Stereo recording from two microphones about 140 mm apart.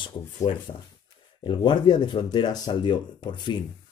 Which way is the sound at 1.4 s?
35° left (ahead or behind).